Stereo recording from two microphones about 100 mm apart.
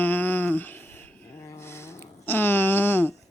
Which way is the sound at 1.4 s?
30° left (ahead or behind).